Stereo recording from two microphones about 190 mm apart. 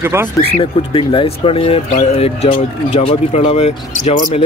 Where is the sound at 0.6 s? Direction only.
30° left (ahead or behind).